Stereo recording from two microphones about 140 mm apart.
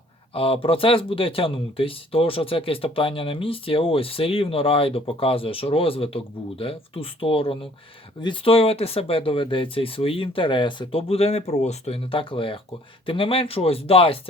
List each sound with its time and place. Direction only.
0.3 s speech: 40° left (ahead or behind)